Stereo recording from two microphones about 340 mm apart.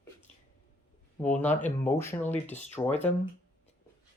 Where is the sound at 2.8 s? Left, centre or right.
Centre.